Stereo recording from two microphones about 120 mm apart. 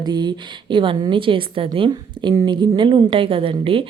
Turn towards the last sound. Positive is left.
turn(degrees=-45)  # may be behind; listen again after turning